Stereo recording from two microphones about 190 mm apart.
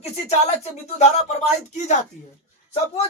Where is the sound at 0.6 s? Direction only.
35° left (ahead or behind).